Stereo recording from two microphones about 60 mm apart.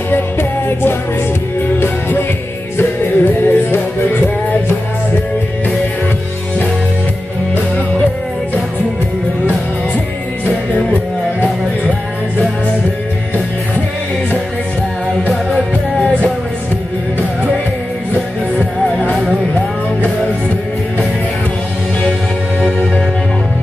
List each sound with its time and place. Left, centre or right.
0.1 s music: left